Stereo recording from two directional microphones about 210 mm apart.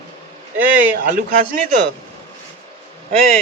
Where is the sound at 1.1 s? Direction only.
40° right (ahead or behind).